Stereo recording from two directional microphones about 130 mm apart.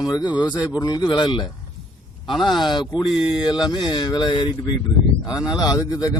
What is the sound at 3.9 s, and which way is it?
Speech, 35° left (ahead or behind).